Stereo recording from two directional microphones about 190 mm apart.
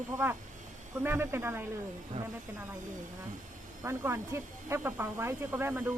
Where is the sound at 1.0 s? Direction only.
10° right (ahead or behind).